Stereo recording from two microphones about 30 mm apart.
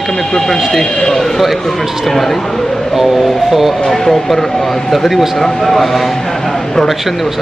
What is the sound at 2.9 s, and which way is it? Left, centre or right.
Speech, centre.